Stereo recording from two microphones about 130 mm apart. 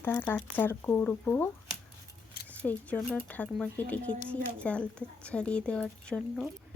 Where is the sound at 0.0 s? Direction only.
15° left (ahead or behind).